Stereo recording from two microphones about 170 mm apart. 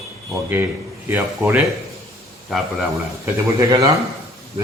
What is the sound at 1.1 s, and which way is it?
Speech, 10° right (ahead or behind).